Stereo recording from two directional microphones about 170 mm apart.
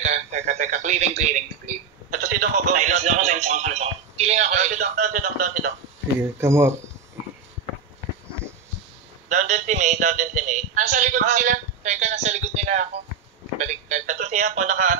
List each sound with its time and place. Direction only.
0.0 s speech: 40° right (ahead or behind)
6.1 s speech: 15° right (ahead or behind)
9.3 s a sound: 45° right (ahead or behind)
13.6 s speech: 45° right (ahead or behind)